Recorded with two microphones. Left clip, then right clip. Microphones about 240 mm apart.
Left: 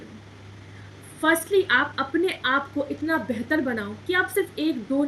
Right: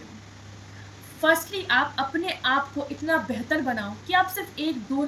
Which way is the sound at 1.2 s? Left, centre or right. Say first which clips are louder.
Left 2 dB; centre.